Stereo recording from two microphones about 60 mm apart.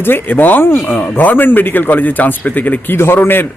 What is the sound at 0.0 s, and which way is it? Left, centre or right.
A man's voice, left.